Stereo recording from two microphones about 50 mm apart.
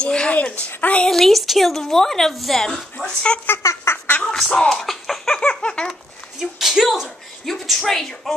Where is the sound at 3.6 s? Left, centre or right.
Left.